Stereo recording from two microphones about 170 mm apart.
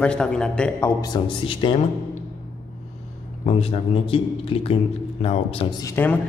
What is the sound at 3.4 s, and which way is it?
A man's voice, 35° left (ahead or behind).